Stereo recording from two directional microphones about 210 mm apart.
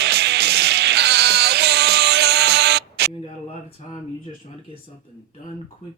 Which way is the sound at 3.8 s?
30° left (ahead or behind).